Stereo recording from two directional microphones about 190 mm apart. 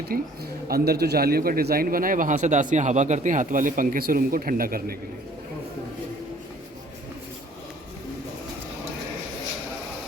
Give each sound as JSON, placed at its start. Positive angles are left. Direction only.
{"t": 0.1, "sound": "a man's voice", "side_deg": -50}